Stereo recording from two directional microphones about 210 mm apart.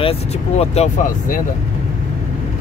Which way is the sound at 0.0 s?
30° left (ahead or behind).